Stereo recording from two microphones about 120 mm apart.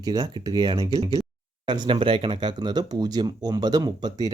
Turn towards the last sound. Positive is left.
turn(degrees=-35)  # may be behind; listen again after turning